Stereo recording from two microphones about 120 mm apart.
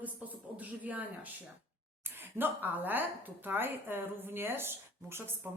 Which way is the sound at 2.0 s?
20° right (ahead or behind).